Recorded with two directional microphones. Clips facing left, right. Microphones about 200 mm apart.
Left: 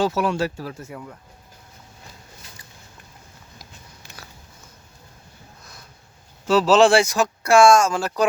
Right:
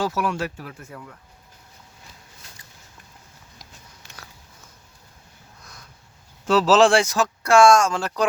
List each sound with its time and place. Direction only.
0.0 s speech: 25° left (ahead or behind)
0.9 s speech: 20° left (ahead or behind)
4.0 s biting: 5° left (ahead or behind)
6.5 s speech: centre (ahead or behind)